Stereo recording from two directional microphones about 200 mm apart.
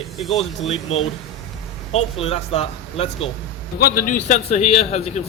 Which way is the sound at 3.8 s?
45° left (ahead or behind).